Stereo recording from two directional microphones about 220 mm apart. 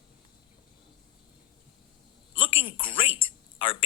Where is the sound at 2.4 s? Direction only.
25° left (ahead or behind).